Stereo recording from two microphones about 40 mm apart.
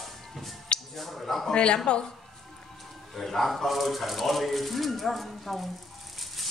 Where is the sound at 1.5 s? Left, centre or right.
Left.